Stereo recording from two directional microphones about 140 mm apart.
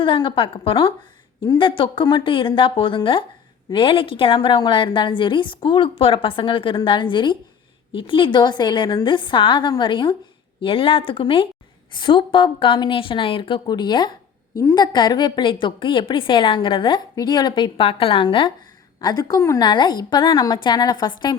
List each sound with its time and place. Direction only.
0.0 s a woman's voice: 35° left (ahead or behind)
14.5 s a woman's voice: 20° left (ahead or behind)